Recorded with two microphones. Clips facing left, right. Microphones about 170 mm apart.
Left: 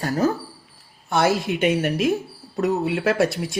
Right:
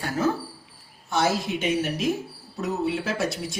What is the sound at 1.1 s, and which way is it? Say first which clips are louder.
Speech: left 4 dB; 60° left (ahead or behind).